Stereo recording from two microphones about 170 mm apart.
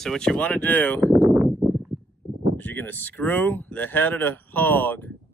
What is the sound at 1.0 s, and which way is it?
Speech, 20° right (ahead or behind).